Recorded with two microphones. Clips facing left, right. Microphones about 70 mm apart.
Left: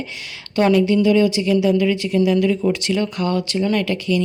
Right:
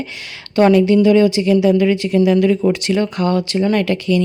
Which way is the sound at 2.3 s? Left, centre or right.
Right.